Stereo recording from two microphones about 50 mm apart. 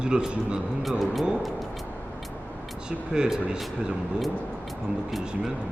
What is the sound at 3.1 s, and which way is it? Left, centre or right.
Speech, centre.